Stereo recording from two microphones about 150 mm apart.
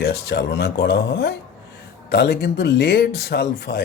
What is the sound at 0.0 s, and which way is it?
Speech, 90° left.